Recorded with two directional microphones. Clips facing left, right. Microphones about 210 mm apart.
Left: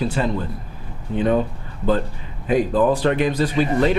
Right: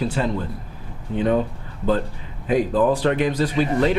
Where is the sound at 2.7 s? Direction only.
25° left (ahead or behind).